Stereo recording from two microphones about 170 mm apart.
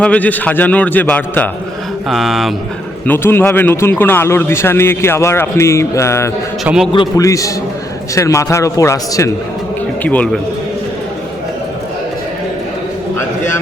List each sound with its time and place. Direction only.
0.0 s a man's voice: 10° left (ahead or behind)
2.0 s speech: centre (ahead or behind)
3.1 s a man's voice: 10° left (ahead or behind)
6.7 s speech: 5° right (ahead or behind)
7.2 s a man's voice: 20° left (ahead or behind)